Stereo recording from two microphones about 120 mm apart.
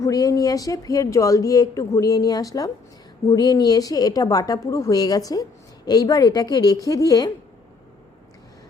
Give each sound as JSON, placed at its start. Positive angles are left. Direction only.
{"t": 0.0, "sound": "speech", "side_deg": 30}